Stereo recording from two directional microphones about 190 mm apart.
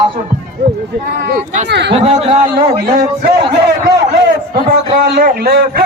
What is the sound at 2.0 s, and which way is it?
Speech, 30° right (ahead or behind).